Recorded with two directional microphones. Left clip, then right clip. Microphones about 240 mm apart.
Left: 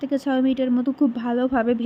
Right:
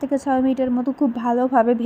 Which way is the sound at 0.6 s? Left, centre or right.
Centre.